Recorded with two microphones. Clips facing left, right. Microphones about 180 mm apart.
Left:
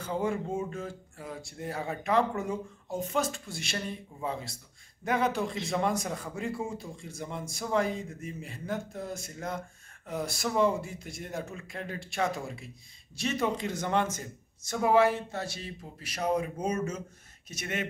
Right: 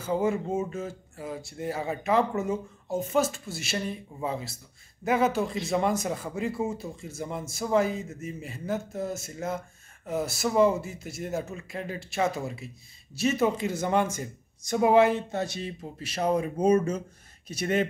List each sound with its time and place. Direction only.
0.0 s a man's voice: 5° right (ahead or behind); by 17.8 s 30° right (ahead or behind)